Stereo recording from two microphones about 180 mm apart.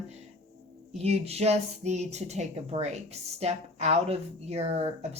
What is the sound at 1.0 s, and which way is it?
A woman's voice, 35° right (ahead or behind).